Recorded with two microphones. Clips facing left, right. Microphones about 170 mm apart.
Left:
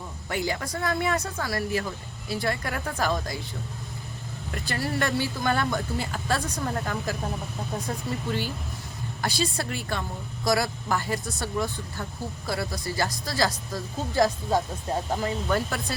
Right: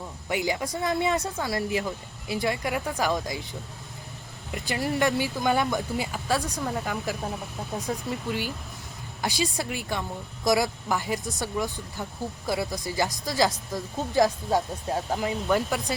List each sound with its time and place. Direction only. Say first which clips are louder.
0.3 s speech: right 2 dB; 15° right (ahead or behind)
4.5 s speech: right 2 dB; 15° right (ahead or behind)
6.1 s speech: right 1 dB; 5° right (ahead or behind)
8.3 s speech: left 1 dB; 10° right (ahead or behind)
14.5 s speech: even; 5° right (ahead or behind)